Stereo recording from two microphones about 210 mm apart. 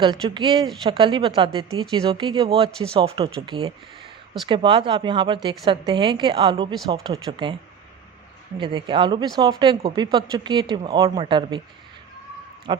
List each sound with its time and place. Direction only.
0.0 s speech: 20° right (ahead or behind)
8.5 s speech: 20° right (ahead or behind)
12.7 s speech: 20° right (ahead or behind)